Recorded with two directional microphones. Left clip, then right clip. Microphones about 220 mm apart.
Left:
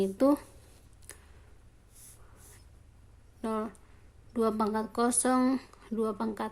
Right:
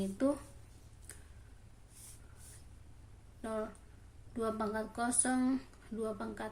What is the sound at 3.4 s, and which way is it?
A woman's voice, 45° left (ahead or behind).